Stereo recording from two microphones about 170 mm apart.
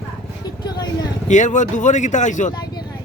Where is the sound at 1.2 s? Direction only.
45° left (ahead or behind).